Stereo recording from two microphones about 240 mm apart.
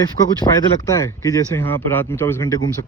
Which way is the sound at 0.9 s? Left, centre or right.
Centre.